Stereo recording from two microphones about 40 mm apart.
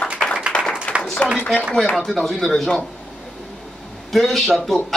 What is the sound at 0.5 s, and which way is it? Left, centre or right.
Clapping, left.